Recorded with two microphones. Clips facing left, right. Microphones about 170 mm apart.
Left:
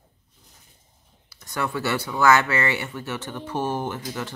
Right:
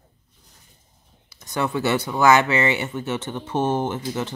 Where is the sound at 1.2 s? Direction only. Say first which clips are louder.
Right 3 dB; 20° right (ahead or behind).